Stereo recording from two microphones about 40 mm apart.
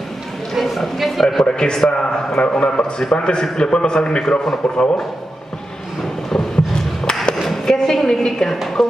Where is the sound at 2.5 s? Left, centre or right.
Left.